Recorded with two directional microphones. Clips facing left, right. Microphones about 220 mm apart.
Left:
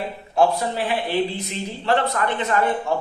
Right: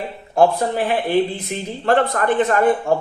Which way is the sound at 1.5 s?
50° right (ahead or behind).